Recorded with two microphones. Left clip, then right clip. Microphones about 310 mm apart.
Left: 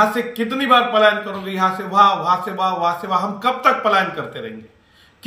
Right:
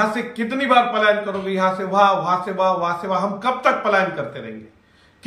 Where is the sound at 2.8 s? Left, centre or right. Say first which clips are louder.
Left 2 dB; centre.